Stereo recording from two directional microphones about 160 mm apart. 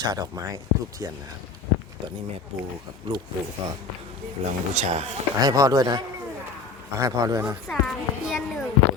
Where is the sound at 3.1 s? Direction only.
30° right (ahead or behind).